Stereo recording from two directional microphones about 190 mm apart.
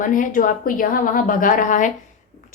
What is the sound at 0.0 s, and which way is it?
A woman's voice, 45° left (ahead or behind).